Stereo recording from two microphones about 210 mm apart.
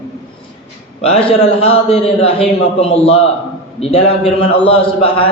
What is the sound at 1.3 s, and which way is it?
A man's voice, 30° left (ahead or behind).